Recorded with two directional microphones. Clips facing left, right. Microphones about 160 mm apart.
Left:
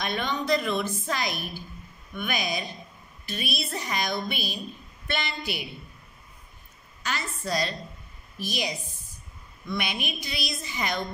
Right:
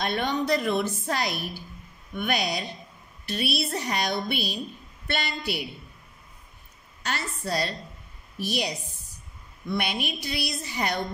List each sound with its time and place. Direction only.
0.1 s a woman's voice: 55° right (ahead or behind)
7.1 s a woman's voice: 60° right (ahead or behind)